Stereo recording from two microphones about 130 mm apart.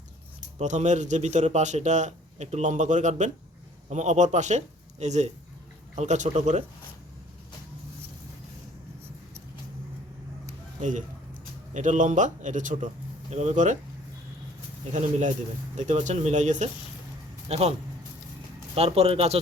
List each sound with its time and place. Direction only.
0.6 s a man's voice: 65° right (ahead or behind)
10.8 s a man's voice: 70° right (ahead or behind)
13.3 s a man's voice: 65° right (ahead or behind)
15.7 s a man's voice: 65° right (ahead or behind)
17.5 s speech: 55° right (ahead or behind)